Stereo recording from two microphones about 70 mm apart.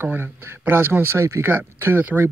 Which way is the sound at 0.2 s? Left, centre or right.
Right.